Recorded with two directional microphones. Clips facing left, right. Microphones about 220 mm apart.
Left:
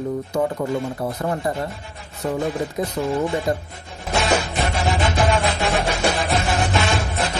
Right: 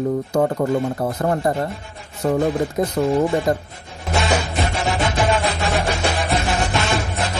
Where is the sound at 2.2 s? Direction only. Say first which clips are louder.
Right 4 dB; 45° right (ahead or behind).